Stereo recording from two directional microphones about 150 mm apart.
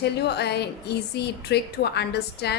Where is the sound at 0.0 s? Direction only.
90° left.